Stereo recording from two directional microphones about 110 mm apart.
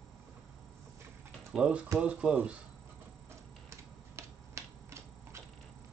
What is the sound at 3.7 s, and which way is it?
Typewriter, 25° right (ahead or behind).